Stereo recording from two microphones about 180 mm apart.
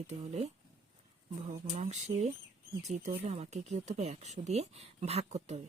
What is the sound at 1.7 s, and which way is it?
Speech, 40° right (ahead or behind).